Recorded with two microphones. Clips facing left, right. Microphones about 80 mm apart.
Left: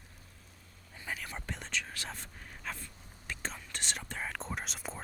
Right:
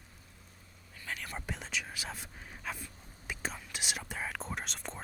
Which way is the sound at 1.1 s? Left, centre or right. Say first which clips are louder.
Right 4 dB; centre.